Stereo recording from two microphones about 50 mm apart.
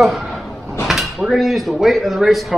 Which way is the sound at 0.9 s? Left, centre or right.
Centre.